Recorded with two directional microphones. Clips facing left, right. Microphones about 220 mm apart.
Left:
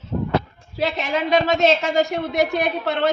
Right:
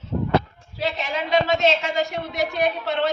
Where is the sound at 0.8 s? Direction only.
55° left (ahead or behind).